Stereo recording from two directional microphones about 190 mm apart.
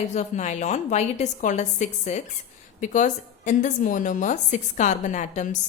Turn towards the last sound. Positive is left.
turn(degrees=40)  # may be behind; listen again after turning